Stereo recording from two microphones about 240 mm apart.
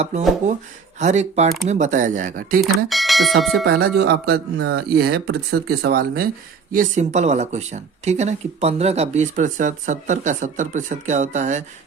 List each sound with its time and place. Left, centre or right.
0.9 s speech: right
2.7 s speech: centre
3.6 s speech: right